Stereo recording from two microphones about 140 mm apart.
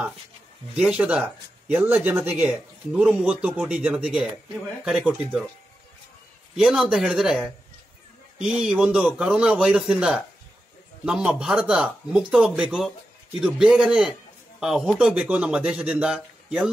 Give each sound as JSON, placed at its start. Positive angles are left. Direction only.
{"t": 0.7, "sound": "a man's voice", "side_deg": -5}
{"t": 6.5, "sound": "a man's voice", "side_deg": 0}